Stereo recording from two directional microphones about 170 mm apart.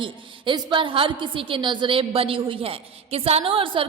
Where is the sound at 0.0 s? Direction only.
30° right (ahead or behind).